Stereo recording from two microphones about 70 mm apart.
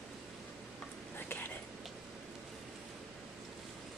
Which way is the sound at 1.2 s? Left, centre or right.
Left.